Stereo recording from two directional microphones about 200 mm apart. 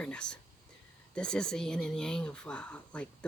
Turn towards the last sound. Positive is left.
turn(degrees=5)  # may be behind; listen again after turning